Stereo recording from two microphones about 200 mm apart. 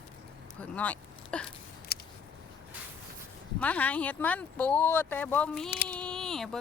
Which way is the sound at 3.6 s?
5° left (ahead or behind).